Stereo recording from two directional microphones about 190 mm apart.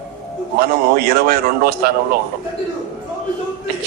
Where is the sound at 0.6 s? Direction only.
55° right (ahead or behind).